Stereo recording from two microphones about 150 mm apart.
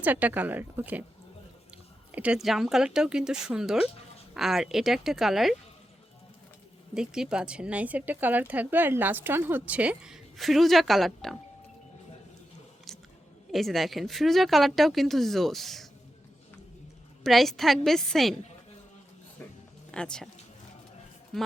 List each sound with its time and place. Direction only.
0.0 s speech: 10° right (ahead or behind)
2.1 s speech: 5° right (ahead or behind)
6.9 s speech: 5° right (ahead or behind)
13.5 s speech: centre (ahead or behind)
17.2 s speech: centre (ahead or behind)
19.9 s speech: 5° left (ahead or behind)
21.3 s a woman's voice: 5° left (ahead or behind)